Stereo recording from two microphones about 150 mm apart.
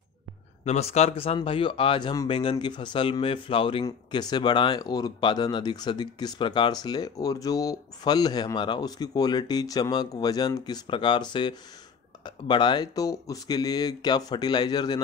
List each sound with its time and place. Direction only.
0.7 s speech: 45° left (ahead or behind); by 15.0 s 30° left (ahead or behind)